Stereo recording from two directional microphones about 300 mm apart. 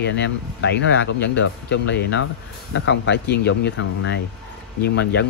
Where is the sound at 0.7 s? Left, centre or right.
Left.